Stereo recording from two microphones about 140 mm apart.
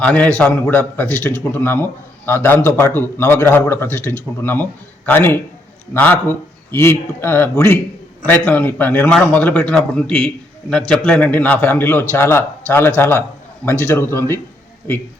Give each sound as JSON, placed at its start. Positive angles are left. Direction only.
{"t": 0.0, "sound": "a man's voice", "side_deg": 10}